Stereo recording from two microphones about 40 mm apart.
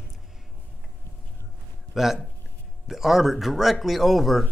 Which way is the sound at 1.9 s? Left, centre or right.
Centre.